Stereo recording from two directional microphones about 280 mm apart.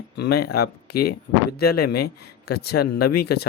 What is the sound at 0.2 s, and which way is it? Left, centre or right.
Speech, left.